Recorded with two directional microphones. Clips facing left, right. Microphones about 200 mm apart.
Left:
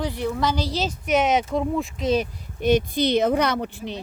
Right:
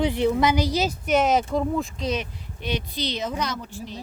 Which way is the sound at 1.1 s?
Centre (ahead or behind).